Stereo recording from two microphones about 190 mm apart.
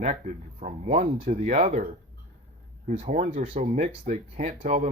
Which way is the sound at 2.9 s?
35° right (ahead or behind).